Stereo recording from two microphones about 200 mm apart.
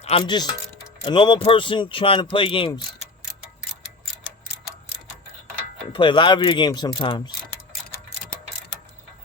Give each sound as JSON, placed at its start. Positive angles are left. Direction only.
{"t": 0.0, "sound": "speech", "side_deg": 30}
{"t": 5.8, "sound": "speech", "side_deg": 25}